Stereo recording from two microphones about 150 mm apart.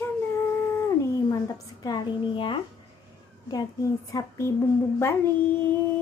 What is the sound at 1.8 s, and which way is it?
Speech, 30° left (ahead or behind).